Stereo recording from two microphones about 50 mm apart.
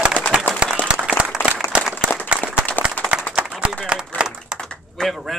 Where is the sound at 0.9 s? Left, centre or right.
Right.